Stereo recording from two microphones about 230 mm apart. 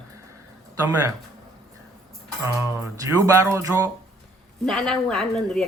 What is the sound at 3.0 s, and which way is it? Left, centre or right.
Speech, centre.